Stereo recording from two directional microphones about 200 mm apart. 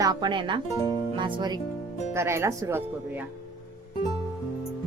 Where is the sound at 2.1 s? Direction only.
15° right (ahead or behind).